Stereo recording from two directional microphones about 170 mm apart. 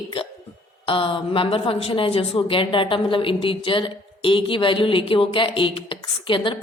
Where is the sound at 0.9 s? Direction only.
30° left (ahead or behind).